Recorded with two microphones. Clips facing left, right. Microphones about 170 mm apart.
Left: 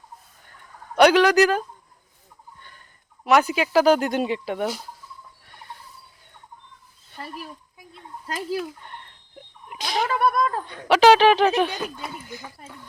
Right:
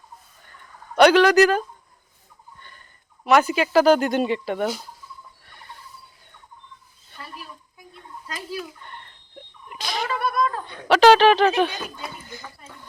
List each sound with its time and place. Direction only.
0.9 s speech: 10° left (ahead or behind)
2.6 s fowl: 5° left (ahead or behind)
3.2 s speech: 10° left (ahead or behind)
8.8 s a sound: 5° left (ahead or behind)
9.8 s a sound: 50° left (ahead or behind)
10.7 s speech: 10° left (ahead or behind)